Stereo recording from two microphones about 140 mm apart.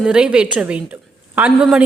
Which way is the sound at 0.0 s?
5° right (ahead or behind).